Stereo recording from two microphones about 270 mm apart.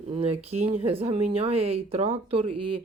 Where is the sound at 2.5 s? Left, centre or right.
Right.